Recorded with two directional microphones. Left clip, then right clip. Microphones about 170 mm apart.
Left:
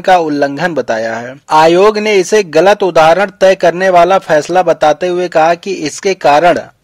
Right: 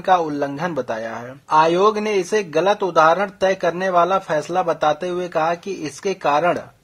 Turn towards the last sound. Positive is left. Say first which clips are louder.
# left 10 dB
turn(degrees=45)  # may be behind; listen again after turning